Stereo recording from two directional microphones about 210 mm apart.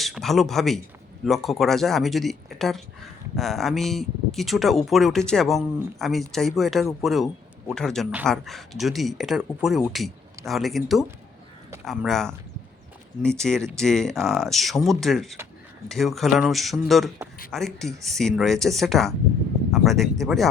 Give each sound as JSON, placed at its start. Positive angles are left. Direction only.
{"t": 0.0, "sound": "speech", "side_deg": 0}